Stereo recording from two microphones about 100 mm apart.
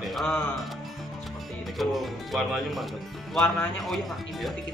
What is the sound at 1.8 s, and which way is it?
Speech, centre (ahead or behind).